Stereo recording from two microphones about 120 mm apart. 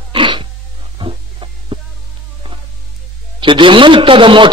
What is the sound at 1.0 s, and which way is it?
Music, 45° right (ahead or behind).